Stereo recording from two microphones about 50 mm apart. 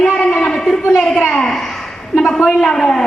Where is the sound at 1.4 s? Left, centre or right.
Centre.